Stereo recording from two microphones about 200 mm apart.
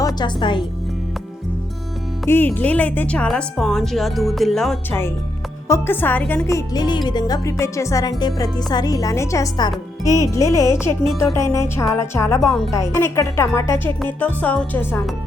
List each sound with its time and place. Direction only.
0.2 s a woman's voice: 25° left (ahead or behind)
2.2 s a woman's voice: 10° left (ahead or behind)